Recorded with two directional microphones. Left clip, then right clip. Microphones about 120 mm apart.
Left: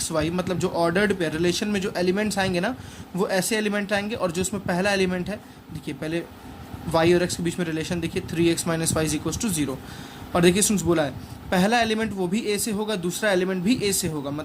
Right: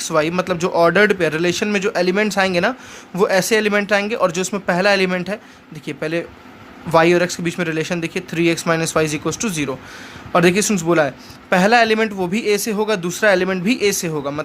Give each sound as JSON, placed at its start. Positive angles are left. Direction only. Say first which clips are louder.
{"t": 0.0, "sound": "a man's voice", "louder": "right 8 dB", "side_deg": -45}